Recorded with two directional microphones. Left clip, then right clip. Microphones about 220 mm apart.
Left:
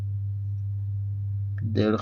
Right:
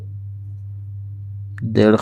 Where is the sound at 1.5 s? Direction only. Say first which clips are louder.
Right 11 dB; 45° right (ahead or behind).